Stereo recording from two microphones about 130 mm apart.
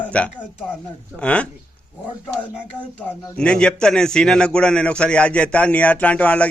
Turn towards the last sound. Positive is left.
turn(degrees=10)  # may be behind; listen again after turning